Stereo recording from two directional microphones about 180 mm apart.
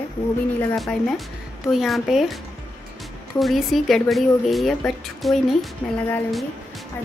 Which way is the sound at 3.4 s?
Centre (ahead or behind).